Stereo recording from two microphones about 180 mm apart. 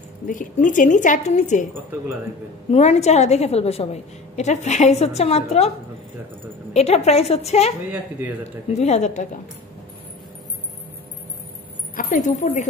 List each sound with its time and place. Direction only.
0.3 s a woman's voice: 45° left (ahead or behind)
2.7 s a woman's voice: 35° left (ahead or behind)
6.7 s a woman's voice: 35° left (ahead or behind)
8.7 s a woman's voice: 40° left (ahead or behind)
11.9 s a woman's voice: 45° left (ahead or behind)